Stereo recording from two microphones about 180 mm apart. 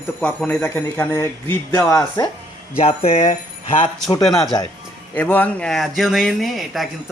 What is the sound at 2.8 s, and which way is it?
Speech, 35° left (ahead or behind).